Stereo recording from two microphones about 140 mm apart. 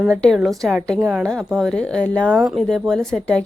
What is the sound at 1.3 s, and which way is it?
Speech, 5° left (ahead or behind).